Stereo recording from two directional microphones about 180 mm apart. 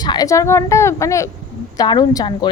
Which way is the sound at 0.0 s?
20° left (ahead or behind).